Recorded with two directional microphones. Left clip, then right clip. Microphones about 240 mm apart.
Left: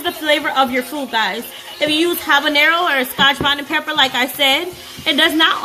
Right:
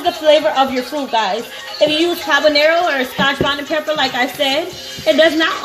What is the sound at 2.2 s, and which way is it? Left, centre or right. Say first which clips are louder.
A woman's voice: right 1 dB; left.